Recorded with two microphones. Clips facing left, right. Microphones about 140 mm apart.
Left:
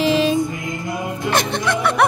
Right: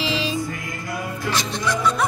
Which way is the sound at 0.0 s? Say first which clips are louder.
Left 8 dB; 50° left (ahead or behind).